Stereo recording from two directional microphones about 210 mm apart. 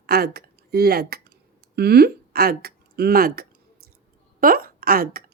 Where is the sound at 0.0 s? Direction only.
50° right (ahead or behind).